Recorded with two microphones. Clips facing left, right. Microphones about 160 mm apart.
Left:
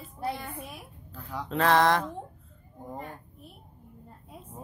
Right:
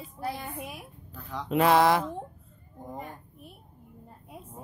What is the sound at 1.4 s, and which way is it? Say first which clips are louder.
Mantra: right 2 dB; 10° right (ahead or behind).